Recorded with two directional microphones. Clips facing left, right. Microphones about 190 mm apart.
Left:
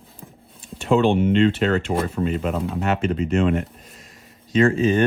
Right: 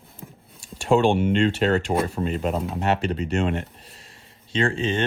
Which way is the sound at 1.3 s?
40° right (ahead or behind).